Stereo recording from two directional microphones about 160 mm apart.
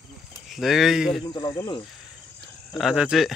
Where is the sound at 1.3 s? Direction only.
25° left (ahead or behind).